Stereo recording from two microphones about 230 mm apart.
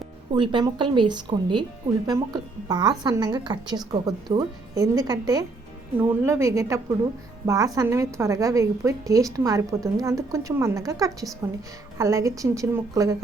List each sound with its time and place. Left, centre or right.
0.3 s a woman's voice: right